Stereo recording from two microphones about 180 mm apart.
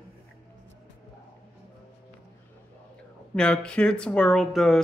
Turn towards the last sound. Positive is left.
turn(degrees=0)  # may be behind; listen again after turning